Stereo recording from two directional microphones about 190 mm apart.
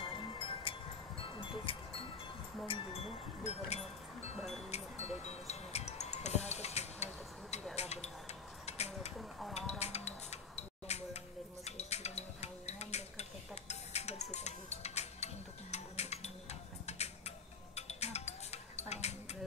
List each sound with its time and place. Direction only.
0.0 s music: 25° left (ahead or behind)
1.3 s wind chime: 25° left (ahead or behind)
2.7 s music: 30° left (ahead or behind)
5.0 s music: 35° left (ahead or behind)
7.7 s a sound: 35° left (ahead or behind)
9.5 s music: 35° left (ahead or behind)
11.6 s dishes: 35° left (ahead or behind)
17.7 s music: 35° left (ahead or behind)